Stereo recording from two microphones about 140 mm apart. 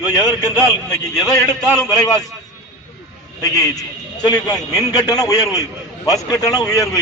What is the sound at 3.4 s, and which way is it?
A man's voice, 25° left (ahead or behind).